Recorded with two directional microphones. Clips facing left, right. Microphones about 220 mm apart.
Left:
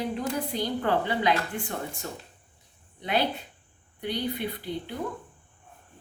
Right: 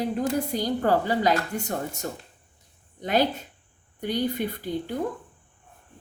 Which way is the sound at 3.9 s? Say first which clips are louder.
Right 4 dB; 45° right (ahead or behind).